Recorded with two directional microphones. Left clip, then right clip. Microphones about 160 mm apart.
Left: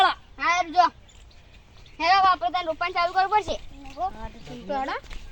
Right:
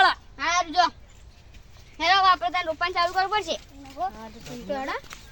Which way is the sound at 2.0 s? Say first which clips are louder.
Even; 10° right (ahead or behind).